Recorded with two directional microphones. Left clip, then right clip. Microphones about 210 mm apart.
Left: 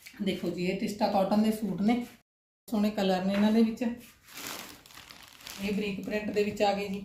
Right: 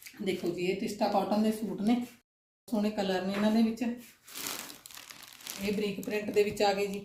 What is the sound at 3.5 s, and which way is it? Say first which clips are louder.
Speech: left 3 dB; 15° left (ahead or behind).